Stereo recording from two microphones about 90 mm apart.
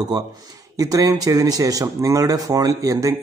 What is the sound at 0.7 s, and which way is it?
Speech, 40° right (ahead or behind).